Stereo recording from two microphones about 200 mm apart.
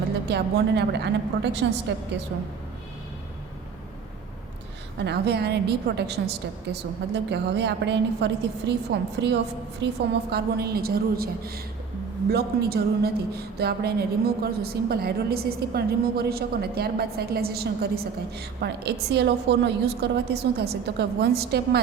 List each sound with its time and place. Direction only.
0.3 s a woman's voice: 55° right (ahead or behind)
4.9 s a woman's voice: 55° right (ahead or behind)